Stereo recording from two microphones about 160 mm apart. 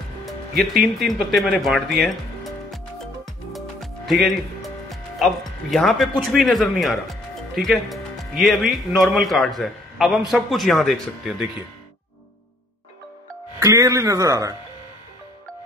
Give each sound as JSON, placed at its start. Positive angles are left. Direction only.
{"t": 0.9, "sound": "speech", "side_deg": 0}
{"t": 3.5, "sound": "music", "side_deg": 0}
{"t": 5.2, "sound": "speech", "side_deg": 0}
{"t": 13.6, "sound": "speech", "side_deg": -20}